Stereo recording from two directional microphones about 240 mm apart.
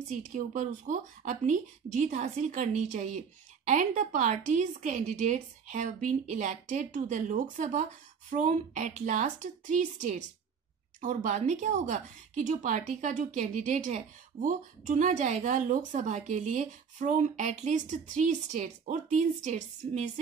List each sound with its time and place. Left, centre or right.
0.2 s a woman's voice: right